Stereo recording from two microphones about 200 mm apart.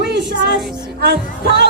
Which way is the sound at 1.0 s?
55° right (ahead or behind).